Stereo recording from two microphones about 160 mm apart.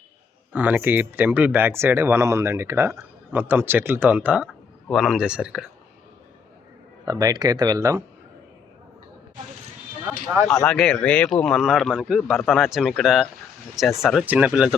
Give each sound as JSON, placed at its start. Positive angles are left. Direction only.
{"t": 0.5, "sound": "speech", "side_deg": -10}
{"t": 7.0, "sound": "speech", "side_deg": -25}
{"t": 10.5, "sound": "speech", "side_deg": 5}